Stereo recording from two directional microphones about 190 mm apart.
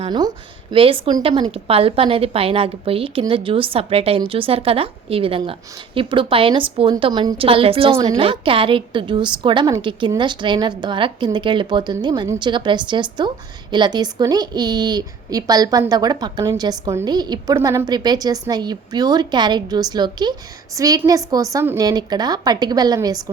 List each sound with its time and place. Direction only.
0.0 s a woman's voice: 20° right (ahead or behind)